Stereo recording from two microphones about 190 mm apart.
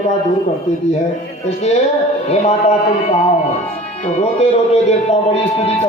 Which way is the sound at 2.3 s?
35° left (ahead or behind).